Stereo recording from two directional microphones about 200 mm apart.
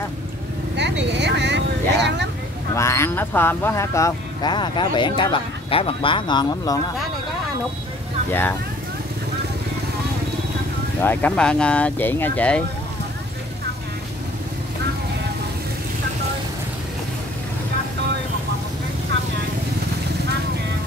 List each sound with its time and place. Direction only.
0.7 s vehicle: 60° right (ahead or behind)
2.7 s speech: 15° left (ahead or behind)
8.3 s speech: 10° left (ahead or behind)
11.0 s speech: 10° left (ahead or behind)